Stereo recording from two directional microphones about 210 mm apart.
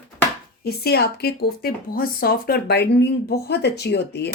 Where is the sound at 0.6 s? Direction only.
50° left (ahead or behind).